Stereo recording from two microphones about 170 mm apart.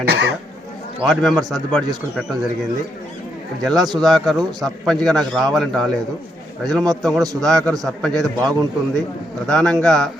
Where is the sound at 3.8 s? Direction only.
25° right (ahead or behind).